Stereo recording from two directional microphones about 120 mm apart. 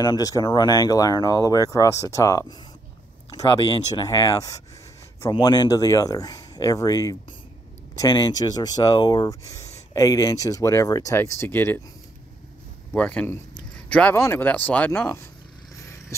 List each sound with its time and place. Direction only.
0.0 s speech: 30° left (ahead or behind); by 11.8 s 15° left (ahead or behind)
12.9 s speech: 10° left (ahead or behind)